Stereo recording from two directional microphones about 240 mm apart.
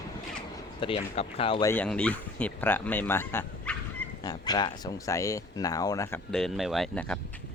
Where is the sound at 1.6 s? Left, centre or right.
Centre.